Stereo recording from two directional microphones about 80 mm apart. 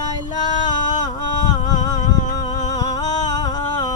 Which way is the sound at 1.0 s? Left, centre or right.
Left.